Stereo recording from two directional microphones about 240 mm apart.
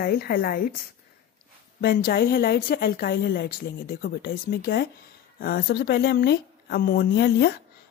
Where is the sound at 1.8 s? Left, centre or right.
Left.